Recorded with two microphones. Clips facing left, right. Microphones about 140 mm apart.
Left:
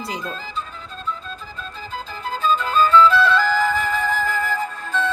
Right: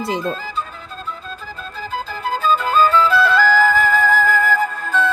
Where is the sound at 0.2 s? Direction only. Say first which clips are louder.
Right 6 dB; 40° right (ahead or behind).